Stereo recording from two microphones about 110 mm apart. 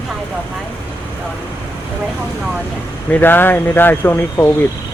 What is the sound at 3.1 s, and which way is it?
Speech, 20° left (ahead or behind).